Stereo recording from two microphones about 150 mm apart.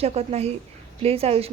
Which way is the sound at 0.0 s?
45° right (ahead or behind).